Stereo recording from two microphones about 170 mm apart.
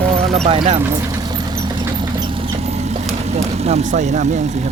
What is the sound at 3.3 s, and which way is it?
Speech, 40° right (ahead or behind).